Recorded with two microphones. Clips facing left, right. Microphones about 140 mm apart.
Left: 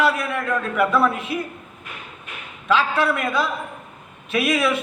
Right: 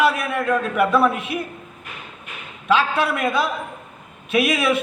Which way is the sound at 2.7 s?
20° right (ahead or behind).